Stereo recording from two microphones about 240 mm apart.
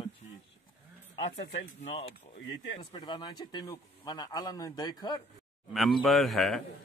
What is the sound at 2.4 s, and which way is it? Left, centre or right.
Speech, left.